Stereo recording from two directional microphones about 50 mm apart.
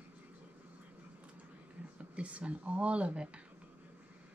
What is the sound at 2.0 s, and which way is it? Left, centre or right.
Speech, right.